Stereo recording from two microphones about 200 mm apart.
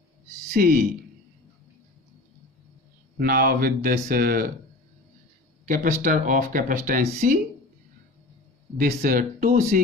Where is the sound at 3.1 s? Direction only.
45° right (ahead or behind).